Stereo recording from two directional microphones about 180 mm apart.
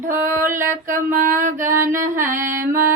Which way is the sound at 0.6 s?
50° right (ahead or behind).